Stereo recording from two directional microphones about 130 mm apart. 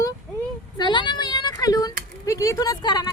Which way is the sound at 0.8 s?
35° left (ahead or behind).